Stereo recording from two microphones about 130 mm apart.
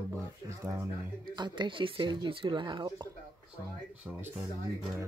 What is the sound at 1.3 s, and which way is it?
Speech, 35° right (ahead or behind).